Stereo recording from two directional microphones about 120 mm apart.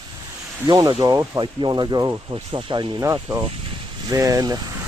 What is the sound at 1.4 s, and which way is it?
Speech, 40° right (ahead or behind).